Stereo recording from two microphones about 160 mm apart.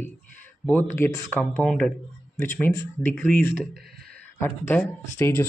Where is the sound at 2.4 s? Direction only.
15° left (ahead or behind).